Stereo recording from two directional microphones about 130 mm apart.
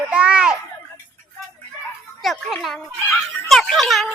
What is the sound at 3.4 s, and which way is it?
Speech, centre (ahead or behind).